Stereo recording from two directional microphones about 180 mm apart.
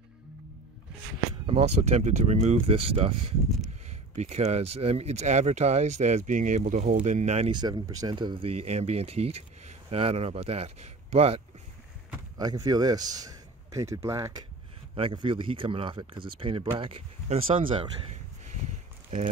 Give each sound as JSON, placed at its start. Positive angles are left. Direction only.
{"t": 1.4, "sound": "speech", "side_deg": -35}
{"t": 7.5, "sound": "speech", "side_deg": -25}
{"t": 12.4, "sound": "a man's voice", "side_deg": -20}
{"t": 15.0, "sound": "speech", "side_deg": -30}